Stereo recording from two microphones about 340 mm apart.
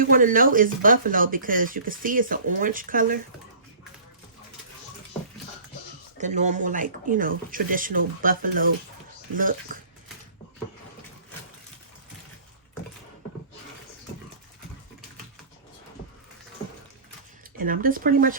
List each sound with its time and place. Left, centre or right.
0.0 s speech: right
6.1 s speech: right
17.6 s speech: right